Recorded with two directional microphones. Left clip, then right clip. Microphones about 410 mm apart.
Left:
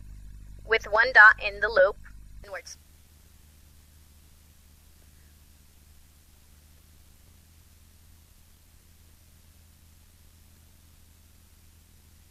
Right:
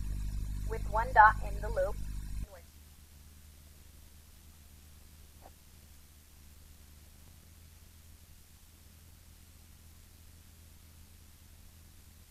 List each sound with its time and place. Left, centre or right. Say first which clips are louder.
0.7 s speech: left 12 dB; left